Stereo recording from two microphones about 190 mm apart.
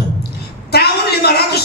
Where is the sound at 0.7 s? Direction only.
55° left (ahead or behind).